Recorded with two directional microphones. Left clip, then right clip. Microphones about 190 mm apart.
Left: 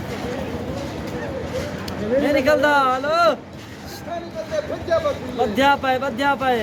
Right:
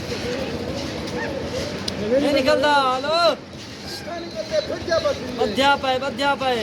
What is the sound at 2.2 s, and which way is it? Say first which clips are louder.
Speech: left 2 dB; 40° left (ahead or behind).